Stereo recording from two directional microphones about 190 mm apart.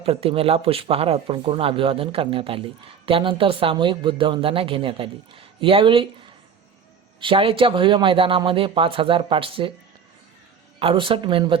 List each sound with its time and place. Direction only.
0.0 s speech: 30° right (ahead or behind)
7.2 s speech: 25° right (ahead or behind)
10.8 s speech: 25° right (ahead or behind)